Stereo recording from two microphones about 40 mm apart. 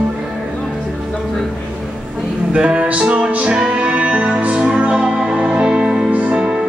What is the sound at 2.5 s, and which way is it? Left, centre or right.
Music, right.